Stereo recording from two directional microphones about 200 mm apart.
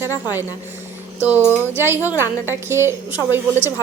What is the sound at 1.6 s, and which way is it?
Speech, 10° right (ahead or behind).